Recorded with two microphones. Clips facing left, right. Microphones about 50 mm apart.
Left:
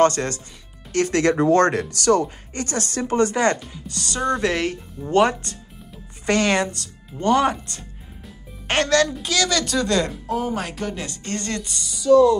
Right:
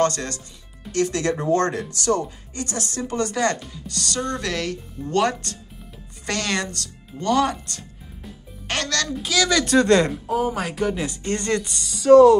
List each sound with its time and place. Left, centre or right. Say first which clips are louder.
0.0 s speech: left 4 dB; left
0.9 s speech: left 4 dB; left
2.5 s speech: left 2 dB; left
3.1 s speech: left 4 dB; left
9.1 s speech: right 1 dB; centre
9.7 s speech: right 5 dB; right
10.2 s speech: right 1 dB; centre
11.8 s speech: right 3 dB; right